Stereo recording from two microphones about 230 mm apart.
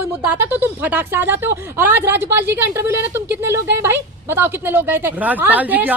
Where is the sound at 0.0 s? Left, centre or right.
Centre.